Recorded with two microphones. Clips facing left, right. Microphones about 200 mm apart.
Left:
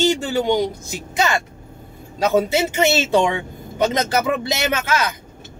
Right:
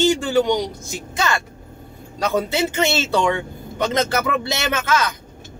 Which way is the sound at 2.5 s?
15° left (ahead or behind).